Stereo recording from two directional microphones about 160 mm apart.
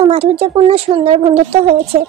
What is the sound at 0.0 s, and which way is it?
Speech, 35° right (ahead or behind).